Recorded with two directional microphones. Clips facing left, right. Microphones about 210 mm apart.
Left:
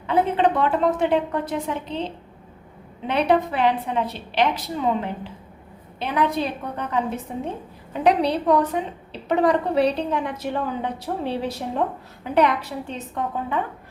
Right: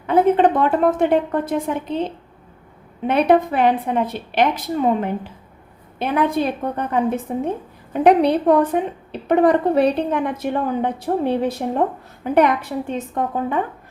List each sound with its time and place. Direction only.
0.1 s a woman's voice: 50° right (ahead or behind)
3.1 s a woman's voice: 50° right (ahead or behind)